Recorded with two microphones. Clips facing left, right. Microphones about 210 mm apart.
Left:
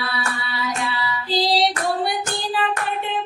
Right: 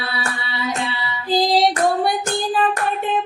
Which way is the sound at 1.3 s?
50° right (ahead or behind).